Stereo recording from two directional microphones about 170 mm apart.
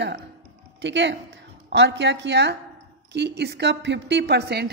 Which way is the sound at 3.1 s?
80° right.